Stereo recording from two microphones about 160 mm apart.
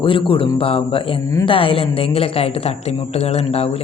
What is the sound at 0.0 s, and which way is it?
Speech, 30° left (ahead or behind).